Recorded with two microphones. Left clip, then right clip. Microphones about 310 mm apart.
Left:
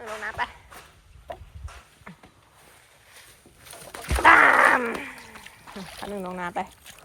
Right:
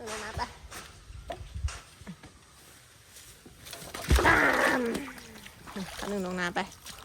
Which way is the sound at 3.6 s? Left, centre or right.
Centre.